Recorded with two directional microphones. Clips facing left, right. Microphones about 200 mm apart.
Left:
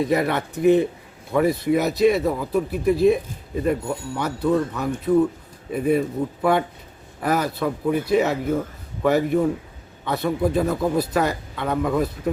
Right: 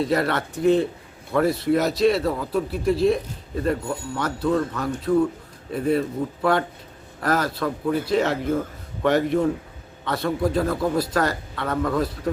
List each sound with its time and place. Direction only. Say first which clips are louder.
0.0 s speech: left 1 dB; 15° left (ahead or behind)